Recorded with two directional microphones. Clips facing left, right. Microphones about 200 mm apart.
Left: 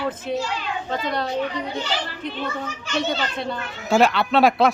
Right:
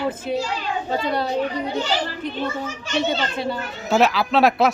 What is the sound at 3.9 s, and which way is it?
Speech, centre (ahead or behind).